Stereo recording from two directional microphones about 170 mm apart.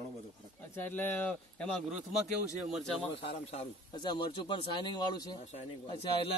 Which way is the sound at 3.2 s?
35° left (ahead or behind).